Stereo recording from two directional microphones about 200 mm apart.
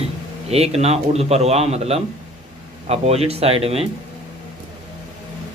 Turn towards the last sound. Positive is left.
turn(degrees=-30)  # may be behind; listen again after turning